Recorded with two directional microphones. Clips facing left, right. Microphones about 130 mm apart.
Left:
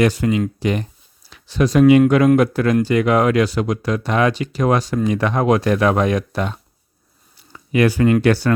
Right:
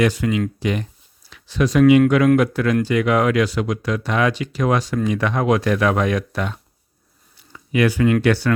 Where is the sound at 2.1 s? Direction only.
35° left (ahead or behind).